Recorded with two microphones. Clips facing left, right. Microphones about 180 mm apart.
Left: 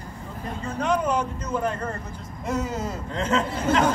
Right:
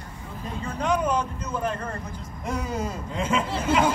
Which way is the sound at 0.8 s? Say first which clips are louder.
Left 1 dB; 10° right (ahead or behind).